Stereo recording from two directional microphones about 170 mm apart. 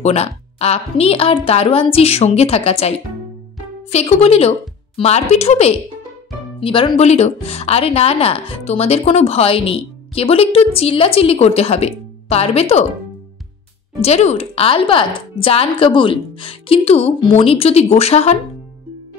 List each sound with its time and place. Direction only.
0.0 s a woman's voice: 40° left (ahead or behind)
14.0 s speech: 40° left (ahead or behind)